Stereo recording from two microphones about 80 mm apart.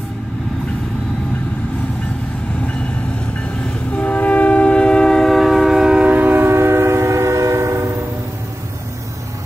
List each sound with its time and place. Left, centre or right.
2.6 s vehicle: centre
3.9 s train: centre; by 7.9 s right